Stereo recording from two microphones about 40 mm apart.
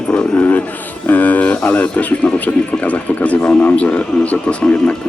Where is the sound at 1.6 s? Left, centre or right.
Left.